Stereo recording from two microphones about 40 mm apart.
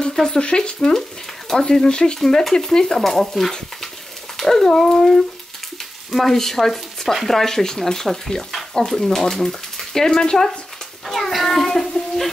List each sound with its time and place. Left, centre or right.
0.0 s speech: centre
0.5 s speech: left
0.7 s speech: centre
2.1 s speech: centre
3.1 s frying: centre
4.4 s dog: centre
4.7 s speech: centre
11.1 s child singing: centre